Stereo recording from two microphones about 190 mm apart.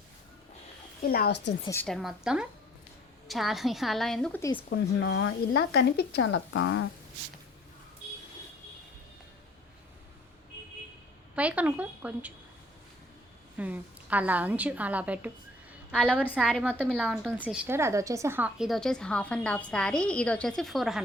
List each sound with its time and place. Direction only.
1.0 s speech: 55° left (ahead or behind)
1.6 s a woman's voice: 10° left (ahead or behind)
1.9 s a woman's voice: centre (ahead or behind)
4.7 s speech: 70° left (ahead or behind); by 6.8 s 90° left
11.3 s a woman's voice: 5° right (ahead or behind)
13.6 s a woman's voice: 10° right (ahead or behind)
15.9 s a woman's voice: 5° left (ahead or behind)
16.6 s a woman's voice: 10° right (ahead or behind)